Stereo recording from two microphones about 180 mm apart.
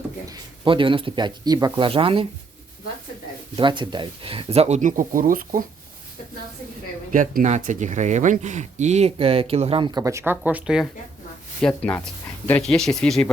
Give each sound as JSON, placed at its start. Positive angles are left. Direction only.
{"t": 0.3, "sound": "speech", "side_deg": -25}
{"t": 1.8, "sound": "speech", "side_deg": -30}
{"t": 3.5, "sound": "speech", "side_deg": -25}
{"t": 7.1, "sound": "speech", "side_deg": -50}
{"t": 11.6, "sound": "speech", "side_deg": 5}